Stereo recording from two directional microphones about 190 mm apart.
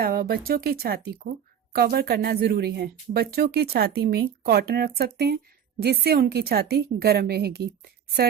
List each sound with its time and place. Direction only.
0.0 s speech: 50° right (ahead or behind)